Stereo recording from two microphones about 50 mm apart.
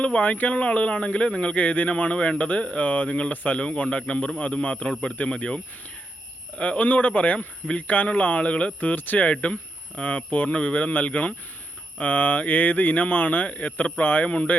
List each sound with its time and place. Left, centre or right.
0.0 s speech: left
6.6 s speech: left